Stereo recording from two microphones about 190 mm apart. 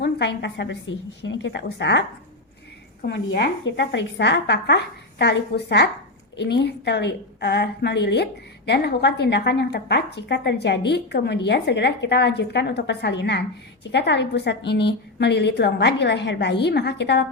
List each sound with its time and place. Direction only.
0.0 s a woman's voice: 65° left (ahead or behind)
3.1 s a woman's voice: 65° left (ahead or behind)